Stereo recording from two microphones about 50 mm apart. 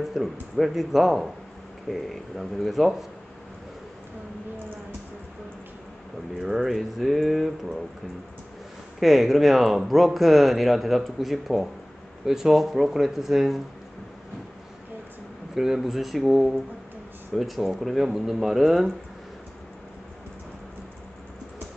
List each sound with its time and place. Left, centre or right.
0.0 s speech: centre
6.3 s speech: centre
9.0 s speech: centre
15.5 s speech: centre